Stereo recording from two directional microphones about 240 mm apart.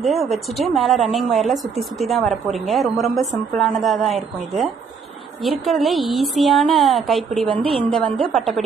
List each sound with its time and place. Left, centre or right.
0.0 s a woman's voice: centre